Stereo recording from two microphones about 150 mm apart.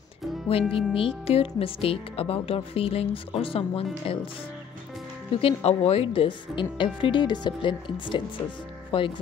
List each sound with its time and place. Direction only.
0.5 s speech: 40° left (ahead or behind)
5.4 s speech: 40° left (ahead or behind)